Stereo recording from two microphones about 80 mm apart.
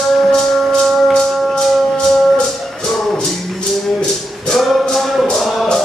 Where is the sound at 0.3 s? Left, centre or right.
Centre.